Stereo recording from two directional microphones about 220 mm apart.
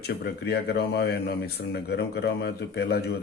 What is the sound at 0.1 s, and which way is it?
Speech, 45° left (ahead or behind).